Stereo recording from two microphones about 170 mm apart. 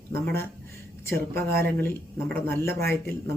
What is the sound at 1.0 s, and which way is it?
Speech, 15° left (ahead or behind).